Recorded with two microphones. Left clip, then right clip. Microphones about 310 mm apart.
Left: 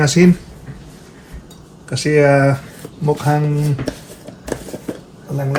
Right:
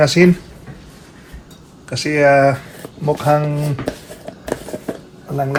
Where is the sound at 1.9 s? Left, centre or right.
Right.